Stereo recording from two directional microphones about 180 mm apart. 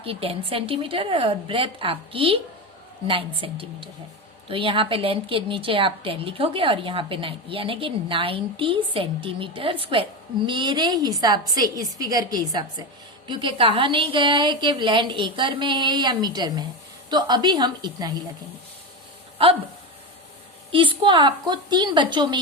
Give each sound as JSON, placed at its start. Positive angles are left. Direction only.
{"t": 0.0, "sound": "a woman's voice", "side_deg": -30}
{"t": 20.7, "sound": "a woman's voice", "side_deg": -25}